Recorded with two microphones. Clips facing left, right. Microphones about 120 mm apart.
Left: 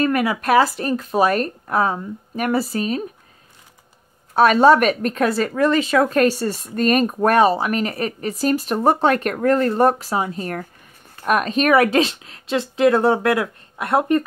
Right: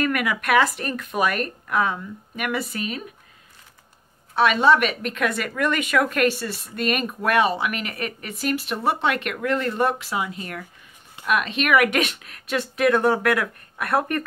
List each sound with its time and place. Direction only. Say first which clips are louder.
0.0 s a woman's voice: left 5 dB; 30° left (ahead or behind)
4.3 s a woman's voice: left 5 dB; 40° left (ahead or behind); by 14.2 s 20° left (ahead or behind)